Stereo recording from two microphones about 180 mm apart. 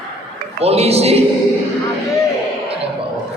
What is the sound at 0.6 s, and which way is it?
Speech, 35° right (ahead or behind).